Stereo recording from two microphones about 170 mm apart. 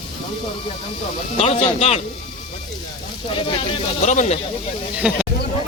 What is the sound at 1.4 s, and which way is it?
Speech, 40° left (ahead or behind).